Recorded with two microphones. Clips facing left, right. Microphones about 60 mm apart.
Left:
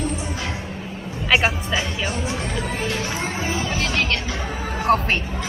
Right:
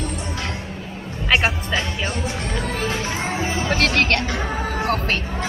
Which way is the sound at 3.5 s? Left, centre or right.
Right.